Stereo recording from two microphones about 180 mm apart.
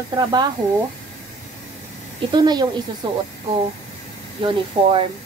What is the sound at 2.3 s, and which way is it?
Speech, 20° right (ahead or behind).